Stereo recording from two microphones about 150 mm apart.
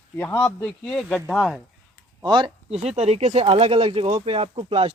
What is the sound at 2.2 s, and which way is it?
Speech, 30° right (ahead or behind).